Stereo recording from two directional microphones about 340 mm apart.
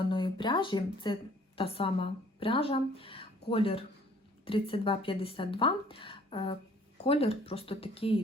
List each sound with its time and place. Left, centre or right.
0.0 s a woman's voice: centre